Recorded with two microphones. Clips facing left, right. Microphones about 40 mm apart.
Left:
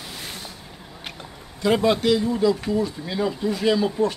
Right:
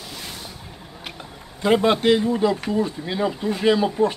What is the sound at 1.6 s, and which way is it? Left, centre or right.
Speech, right.